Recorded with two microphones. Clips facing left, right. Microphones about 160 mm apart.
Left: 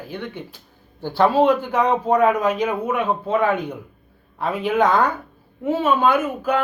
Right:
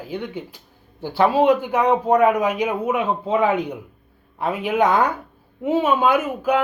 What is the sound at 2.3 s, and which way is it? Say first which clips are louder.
Speech: even; 15° right (ahead or behind).